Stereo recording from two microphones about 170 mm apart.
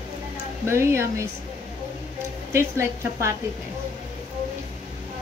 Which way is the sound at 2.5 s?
15° right (ahead or behind).